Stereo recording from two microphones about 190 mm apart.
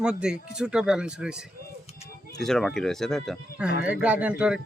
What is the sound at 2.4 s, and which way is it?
Speech, centre (ahead or behind).